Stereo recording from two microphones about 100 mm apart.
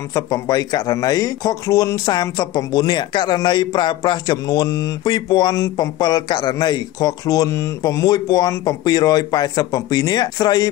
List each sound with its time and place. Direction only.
0.1 s speech: 40° left (ahead or behind)
3.3 s a sound: 45° left (ahead or behind)
5.1 s speech: 45° left (ahead or behind)